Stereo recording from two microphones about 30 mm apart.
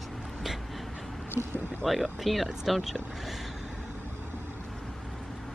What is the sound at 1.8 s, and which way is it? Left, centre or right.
Speech, centre.